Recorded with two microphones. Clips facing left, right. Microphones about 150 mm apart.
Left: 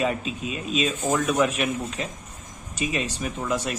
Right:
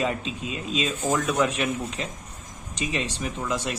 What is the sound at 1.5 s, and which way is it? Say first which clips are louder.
Speech: left 1 dB; 30° right (ahead or behind).